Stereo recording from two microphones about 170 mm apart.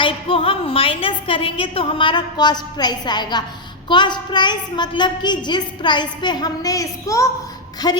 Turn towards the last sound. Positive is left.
turn(degrees=25)  # may be behind; listen again after turning